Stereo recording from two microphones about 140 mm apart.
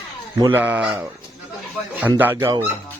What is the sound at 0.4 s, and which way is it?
Speech, 15° right (ahead or behind).